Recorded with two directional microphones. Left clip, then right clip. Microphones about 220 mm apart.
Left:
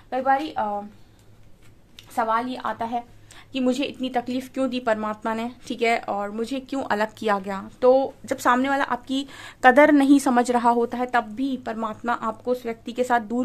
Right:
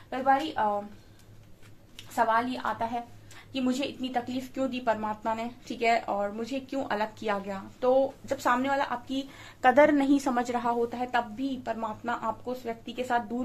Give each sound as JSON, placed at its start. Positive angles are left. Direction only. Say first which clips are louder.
{"t": 0.1, "sound": "a woman's voice", "louder": "left 4 dB", "side_deg": 45}
{"t": 2.1, "sound": "a woman's voice", "louder": "left 2 dB", "side_deg": 40}